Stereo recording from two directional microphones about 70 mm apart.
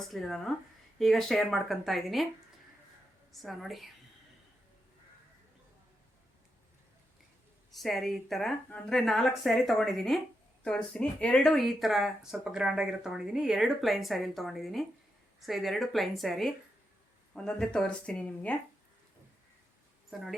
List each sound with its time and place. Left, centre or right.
0.1 s speech: centre
3.3 s speech: centre
7.7 s speech: centre
11.5 s speech: centre
20.1 s speech: centre